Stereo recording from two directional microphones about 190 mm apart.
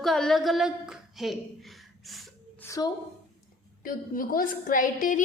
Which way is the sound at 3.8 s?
50° left (ahead or behind).